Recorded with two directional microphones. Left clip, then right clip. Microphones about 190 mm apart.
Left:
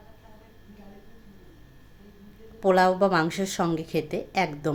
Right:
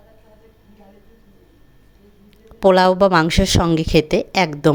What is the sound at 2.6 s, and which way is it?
Speech, 50° right (ahead or behind).